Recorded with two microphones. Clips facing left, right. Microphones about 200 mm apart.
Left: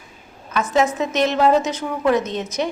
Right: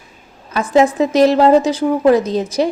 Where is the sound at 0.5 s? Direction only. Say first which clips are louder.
Right 6 dB; 30° right (ahead or behind).